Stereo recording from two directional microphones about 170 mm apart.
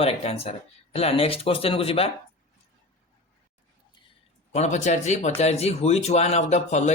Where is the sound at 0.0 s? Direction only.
35° left (ahead or behind).